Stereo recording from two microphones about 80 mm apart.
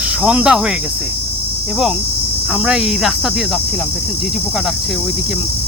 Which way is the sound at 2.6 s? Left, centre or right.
Centre.